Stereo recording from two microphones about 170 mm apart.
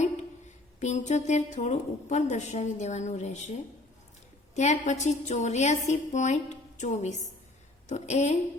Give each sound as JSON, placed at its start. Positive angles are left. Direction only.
{"t": 0.0, "sound": "speech", "side_deg": 45}
{"t": 4.5, "sound": "a woman's voice", "side_deg": 40}